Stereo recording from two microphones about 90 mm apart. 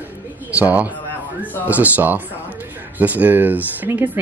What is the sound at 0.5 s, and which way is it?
A man's voice, 15° right (ahead or behind).